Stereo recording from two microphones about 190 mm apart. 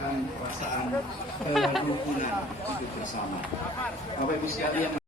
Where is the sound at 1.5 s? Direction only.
Centre (ahead or behind).